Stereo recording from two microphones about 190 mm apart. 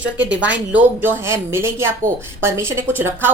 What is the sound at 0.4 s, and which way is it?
A woman's voice, 10° right (ahead or behind).